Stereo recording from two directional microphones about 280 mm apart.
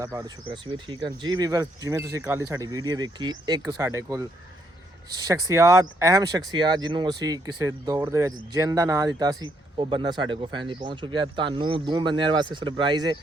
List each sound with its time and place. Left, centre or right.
0.0 s speech: centre